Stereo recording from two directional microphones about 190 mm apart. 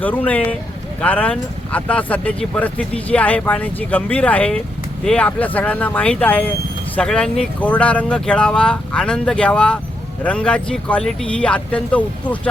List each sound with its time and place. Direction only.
0.0 s speech: 10° left (ahead or behind)